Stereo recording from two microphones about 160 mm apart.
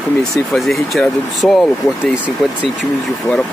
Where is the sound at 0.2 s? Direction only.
Centre (ahead or behind).